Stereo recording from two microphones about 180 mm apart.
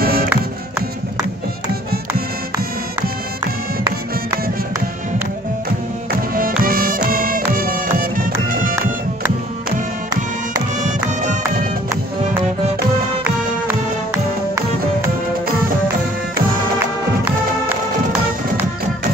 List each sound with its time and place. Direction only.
0.0 s music: 55° right (ahead or behind)
6.3 s music: 50° right (ahead or behind)
13.2 s music: 10° right (ahead or behind)